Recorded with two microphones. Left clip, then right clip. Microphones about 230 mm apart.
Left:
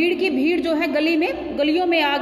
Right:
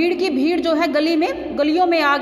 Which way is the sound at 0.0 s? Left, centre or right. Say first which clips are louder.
Right 1 dB; centre.